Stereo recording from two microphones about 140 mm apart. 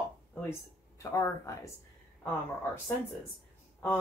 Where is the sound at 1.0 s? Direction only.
20° left (ahead or behind).